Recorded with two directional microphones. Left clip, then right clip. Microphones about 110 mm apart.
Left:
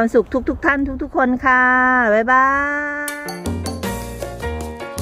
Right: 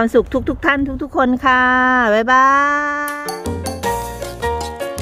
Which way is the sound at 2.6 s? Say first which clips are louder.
Right 4 dB; 10° right (ahead or behind).